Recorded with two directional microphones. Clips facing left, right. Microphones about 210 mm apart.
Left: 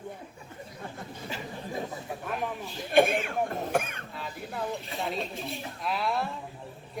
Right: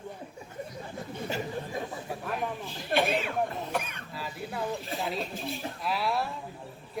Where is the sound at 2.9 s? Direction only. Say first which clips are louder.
Left 4 dB; 50° left (ahead or behind).